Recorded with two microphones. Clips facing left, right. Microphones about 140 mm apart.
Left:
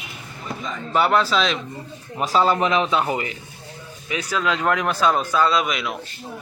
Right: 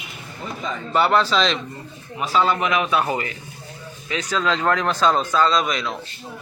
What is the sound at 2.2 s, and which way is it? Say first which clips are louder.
Speech: left 1 dB; 40° left (ahead or behind).